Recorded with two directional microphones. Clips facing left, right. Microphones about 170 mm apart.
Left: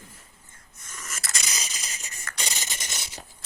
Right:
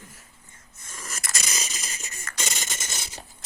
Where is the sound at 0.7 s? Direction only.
30° right (ahead or behind).